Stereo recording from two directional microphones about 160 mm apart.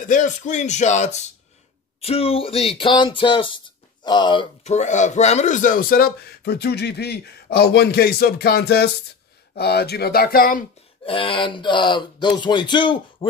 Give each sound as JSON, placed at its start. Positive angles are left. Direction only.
{"t": 0.0, "sound": "speech", "side_deg": 50}
{"t": 4.6, "sound": "speech", "side_deg": 50}
{"t": 11.1, "sound": "speech", "side_deg": 30}